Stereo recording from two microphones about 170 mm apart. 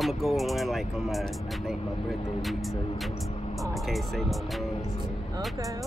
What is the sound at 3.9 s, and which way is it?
Speech, centre (ahead or behind).